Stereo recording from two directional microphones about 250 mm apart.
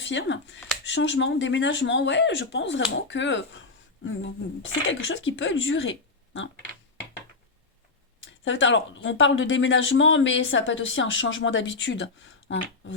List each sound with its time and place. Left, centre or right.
0.0 s speech: left
8.2 s speech: left